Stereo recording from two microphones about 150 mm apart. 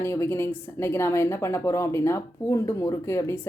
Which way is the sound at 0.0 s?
15° left (ahead or behind).